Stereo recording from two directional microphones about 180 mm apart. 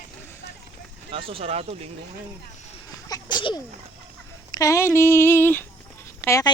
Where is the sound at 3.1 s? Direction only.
25° left (ahead or behind).